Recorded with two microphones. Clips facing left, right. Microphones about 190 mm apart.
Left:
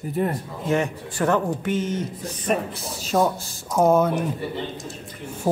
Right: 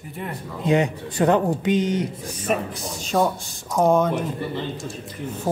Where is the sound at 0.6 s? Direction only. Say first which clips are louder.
Right 3 dB; 15° right (ahead or behind).